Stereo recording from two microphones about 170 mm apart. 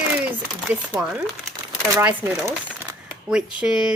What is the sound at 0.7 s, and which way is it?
Speech, 5° right (ahead or behind).